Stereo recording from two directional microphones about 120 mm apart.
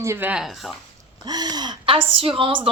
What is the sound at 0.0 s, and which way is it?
Speech, 20° right (ahead or behind).